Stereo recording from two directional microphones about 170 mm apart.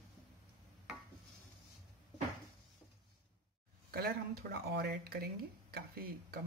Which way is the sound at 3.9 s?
65° right (ahead or behind).